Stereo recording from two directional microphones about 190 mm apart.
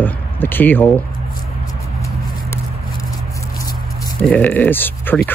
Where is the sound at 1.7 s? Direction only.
15° left (ahead or behind).